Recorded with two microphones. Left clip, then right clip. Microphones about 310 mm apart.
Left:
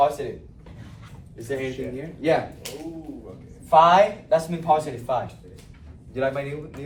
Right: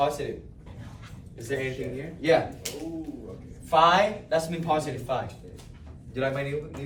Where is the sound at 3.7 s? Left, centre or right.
Centre.